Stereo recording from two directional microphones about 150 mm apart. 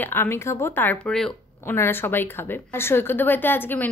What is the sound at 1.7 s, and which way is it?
A woman's voice, 15° left (ahead or behind).